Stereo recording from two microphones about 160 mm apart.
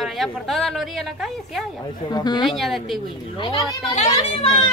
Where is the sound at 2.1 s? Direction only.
25° left (ahead or behind).